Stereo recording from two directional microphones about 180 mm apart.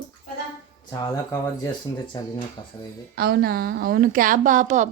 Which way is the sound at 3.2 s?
60° right (ahead or behind).